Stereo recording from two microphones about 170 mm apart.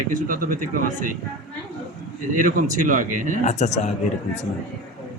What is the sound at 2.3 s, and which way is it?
A man's voice, 50° right (ahead or behind).